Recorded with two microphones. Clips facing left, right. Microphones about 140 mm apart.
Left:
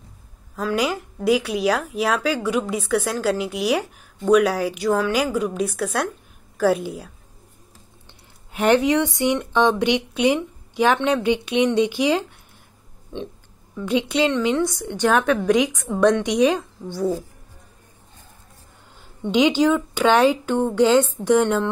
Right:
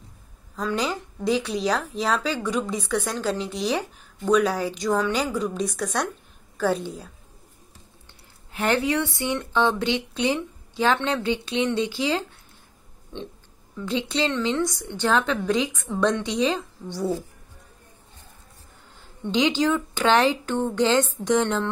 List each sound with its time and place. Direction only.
0.6 s a woman's voice: 10° left (ahead or behind)
8.5 s a woman's voice: 20° left (ahead or behind)
16.9 s speech: centre (ahead or behind)
19.2 s a woman's voice: 10° left (ahead or behind)